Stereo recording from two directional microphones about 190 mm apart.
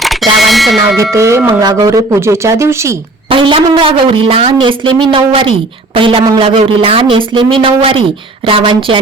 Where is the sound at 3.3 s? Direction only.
25° right (ahead or behind).